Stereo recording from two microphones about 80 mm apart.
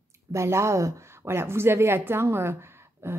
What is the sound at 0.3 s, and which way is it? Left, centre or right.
A woman's voice, right.